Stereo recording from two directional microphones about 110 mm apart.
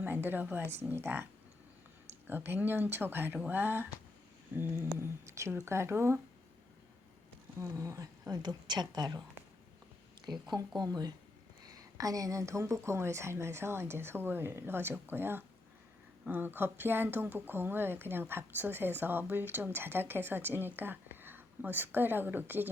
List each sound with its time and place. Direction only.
0.0 s a woman's voice: 20° right (ahead or behind)
3.3 s speech: 10° right (ahead or behind)
3.6 s speech: 20° right (ahead or behind)
7.6 s a woman's voice: 30° right (ahead or behind)
10.8 s a woman's voice: 35° right (ahead or behind); by 22.7 s 15° right (ahead or behind)